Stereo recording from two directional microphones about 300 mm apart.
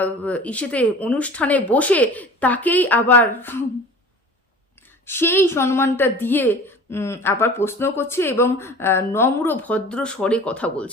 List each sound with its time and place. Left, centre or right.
0.0 s speech: centre
5.0 s a woman's voice: centre